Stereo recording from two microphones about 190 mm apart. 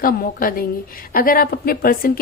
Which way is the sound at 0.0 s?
50° left (ahead or behind).